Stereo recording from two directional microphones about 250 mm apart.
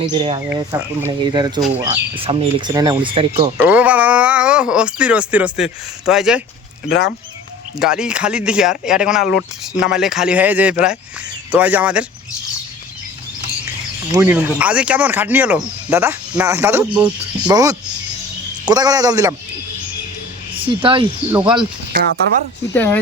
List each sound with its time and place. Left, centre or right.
0.0 s speech: right
3.6 s speech: centre
7.8 s speech: centre
14.1 s speech: centre
20.6 s speech: right
22.7 s speech: centre